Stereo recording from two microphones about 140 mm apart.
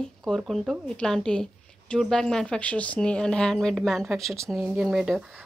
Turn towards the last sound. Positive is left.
turn(degrees=-5)  # may be behind; listen again after turning